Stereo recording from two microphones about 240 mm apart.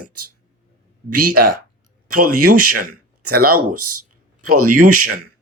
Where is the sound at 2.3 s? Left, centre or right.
Right.